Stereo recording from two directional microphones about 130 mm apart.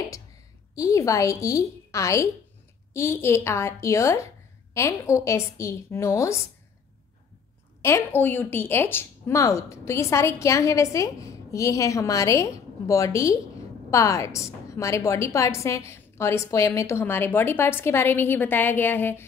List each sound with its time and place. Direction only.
0.7 s speech: 25° left (ahead or behind)
7.8 s a woman's voice: 20° left (ahead or behind)